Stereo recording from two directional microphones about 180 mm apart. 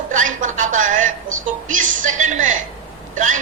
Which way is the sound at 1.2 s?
45° right (ahead or behind).